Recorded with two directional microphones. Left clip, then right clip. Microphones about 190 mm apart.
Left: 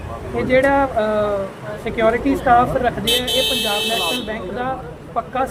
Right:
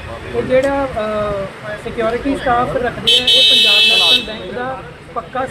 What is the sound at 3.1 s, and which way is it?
Speech, 35° left (ahead or behind).